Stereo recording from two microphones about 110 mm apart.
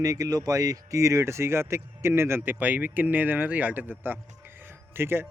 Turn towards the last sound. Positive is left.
turn(degrees=-20)  # may be behind; listen again after turning